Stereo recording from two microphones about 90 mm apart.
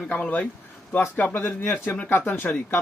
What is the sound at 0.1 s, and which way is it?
Speech, 15° left (ahead or behind).